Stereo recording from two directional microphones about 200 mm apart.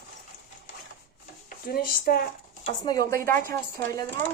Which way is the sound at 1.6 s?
50° left (ahead or behind).